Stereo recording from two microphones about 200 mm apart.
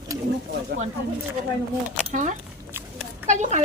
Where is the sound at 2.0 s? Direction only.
40° right (ahead or behind).